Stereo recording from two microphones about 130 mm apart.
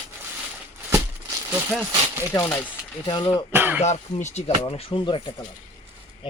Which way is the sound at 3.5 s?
15° right (ahead or behind).